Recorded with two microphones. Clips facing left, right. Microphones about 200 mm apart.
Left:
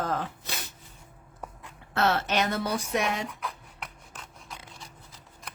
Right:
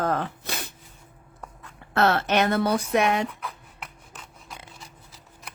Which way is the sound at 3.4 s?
Centre (ahead or behind).